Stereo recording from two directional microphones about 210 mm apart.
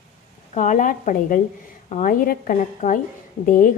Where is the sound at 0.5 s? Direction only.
35° left (ahead or behind).